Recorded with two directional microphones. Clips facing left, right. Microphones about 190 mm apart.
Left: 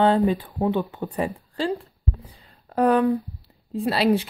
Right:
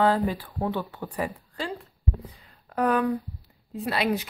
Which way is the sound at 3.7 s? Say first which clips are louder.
Left 6 dB; 30° left (ahead or behind).